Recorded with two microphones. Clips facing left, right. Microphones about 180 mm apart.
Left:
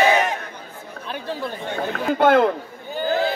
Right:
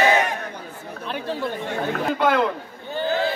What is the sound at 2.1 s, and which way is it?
Speech, 50° left (ahead or behind).